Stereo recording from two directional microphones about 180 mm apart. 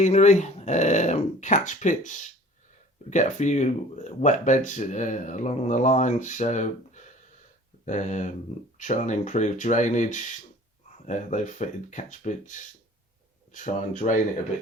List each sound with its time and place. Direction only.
0.0 s speech: 40° left (ahead or behind)